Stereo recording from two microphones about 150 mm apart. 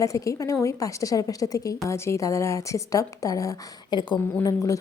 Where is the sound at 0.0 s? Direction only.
20° left (ahead or behind).